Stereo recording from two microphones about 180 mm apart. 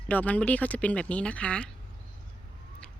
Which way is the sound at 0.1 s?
10° left (ahead or behind).